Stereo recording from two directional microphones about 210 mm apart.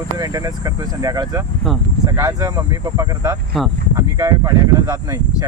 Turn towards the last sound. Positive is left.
turn(degrees=-20)  # may be behind; listen again after turning